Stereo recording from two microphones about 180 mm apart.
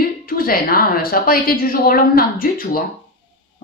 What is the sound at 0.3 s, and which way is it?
A woman's voice, 55° left (ahead or behind).